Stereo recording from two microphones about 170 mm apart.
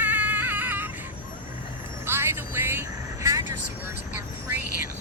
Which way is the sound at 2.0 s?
15° right (ahead or behind).